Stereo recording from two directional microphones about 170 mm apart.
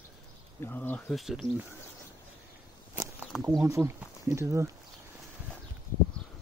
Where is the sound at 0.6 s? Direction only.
10° left (ahead or behind).